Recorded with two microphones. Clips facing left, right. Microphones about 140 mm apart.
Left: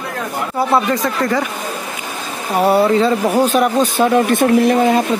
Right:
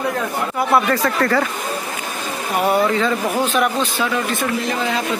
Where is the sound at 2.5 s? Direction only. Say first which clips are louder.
Left 5 dB; 35° left (ahead or behind).